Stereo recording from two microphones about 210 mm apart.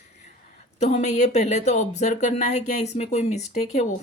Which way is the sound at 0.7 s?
30° left (ahead or behind).